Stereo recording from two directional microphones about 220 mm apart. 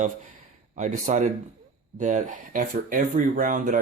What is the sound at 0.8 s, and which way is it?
Speech, 35° right (ahead or behind).